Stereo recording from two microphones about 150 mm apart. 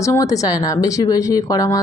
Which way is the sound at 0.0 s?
20° left (ahead or behind).